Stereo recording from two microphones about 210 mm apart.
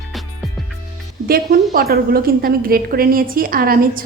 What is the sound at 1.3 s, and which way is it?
A woman's voice, 45° right (ahead or behind).